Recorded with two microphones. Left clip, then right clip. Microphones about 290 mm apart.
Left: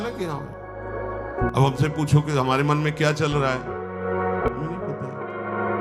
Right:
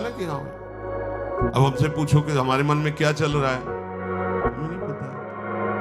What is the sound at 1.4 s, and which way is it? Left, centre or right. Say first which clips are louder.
Speech: even; centre.